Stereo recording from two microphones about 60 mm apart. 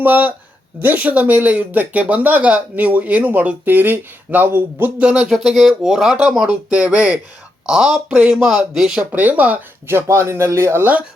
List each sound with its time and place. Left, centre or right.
0.0 s speech: right
4.9 s speech: centre
5.3 s speech: centre
6.7 s speech: centre
7.7 s speech: centre
9.1 s speech: right
9.8 s speech: right